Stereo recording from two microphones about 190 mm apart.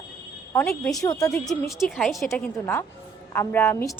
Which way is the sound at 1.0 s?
20° left (ahead or behind).